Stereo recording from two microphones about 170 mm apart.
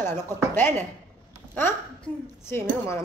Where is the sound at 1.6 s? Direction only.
15° left (ahead or behind).